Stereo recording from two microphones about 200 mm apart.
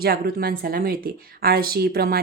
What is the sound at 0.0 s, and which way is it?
Speech, 50° right (ahead or behind).